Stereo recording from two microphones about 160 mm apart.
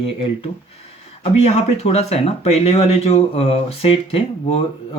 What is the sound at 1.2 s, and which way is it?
Speech, 40° left (ahead or behind).